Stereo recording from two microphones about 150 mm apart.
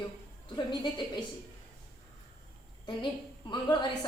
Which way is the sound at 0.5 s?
30° left (ahead or behind).